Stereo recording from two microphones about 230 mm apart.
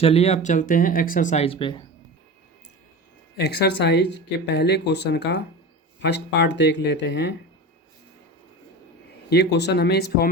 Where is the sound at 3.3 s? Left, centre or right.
Left.